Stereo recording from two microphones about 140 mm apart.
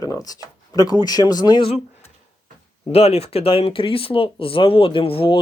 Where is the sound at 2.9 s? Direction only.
45° left (ahead or behind).